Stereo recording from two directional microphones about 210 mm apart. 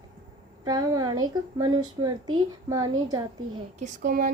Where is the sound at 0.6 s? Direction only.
15° right (ahead or behind).